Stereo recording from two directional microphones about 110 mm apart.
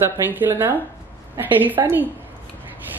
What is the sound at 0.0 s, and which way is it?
Speech, 20° right (ahead or behind).